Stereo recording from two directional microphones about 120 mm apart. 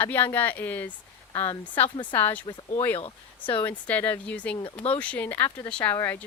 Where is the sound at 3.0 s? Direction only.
45° left (ahead or behind).